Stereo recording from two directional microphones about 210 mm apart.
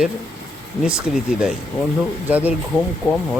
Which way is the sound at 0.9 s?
5° right (ahead or behind).